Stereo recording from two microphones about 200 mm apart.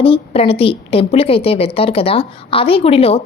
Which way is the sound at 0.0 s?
30° left (ahead or behind).